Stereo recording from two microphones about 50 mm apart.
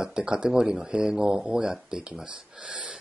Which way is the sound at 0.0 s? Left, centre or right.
Centre.